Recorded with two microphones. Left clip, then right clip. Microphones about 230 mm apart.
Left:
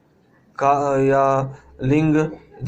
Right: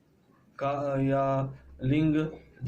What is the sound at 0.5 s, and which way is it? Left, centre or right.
A man's voice, left.